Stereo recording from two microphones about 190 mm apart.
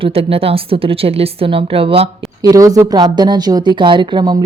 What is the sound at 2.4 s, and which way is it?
Speech, 15° right (ahead or behind).